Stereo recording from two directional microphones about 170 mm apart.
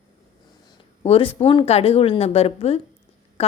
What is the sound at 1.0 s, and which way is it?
A woman's voice, 35° left (ahead or behind).